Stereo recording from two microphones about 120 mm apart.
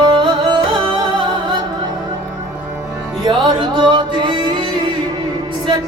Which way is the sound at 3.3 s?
40° right (ahead or behind).